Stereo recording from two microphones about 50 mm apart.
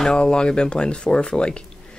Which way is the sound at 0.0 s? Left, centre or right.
Centre.